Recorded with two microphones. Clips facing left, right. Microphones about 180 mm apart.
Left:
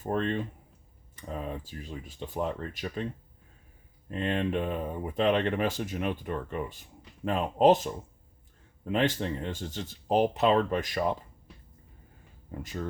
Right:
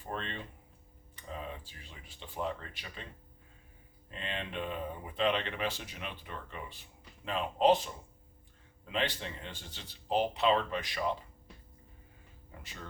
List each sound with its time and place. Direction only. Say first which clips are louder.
0.0 s speech: left 11 dB; 45° left (ahead or behind)
4.1 s speech: left 11 dB; 45° left (ahead or behind)
12.5 s speech: left 13 dB; 45° left (ahead or behind)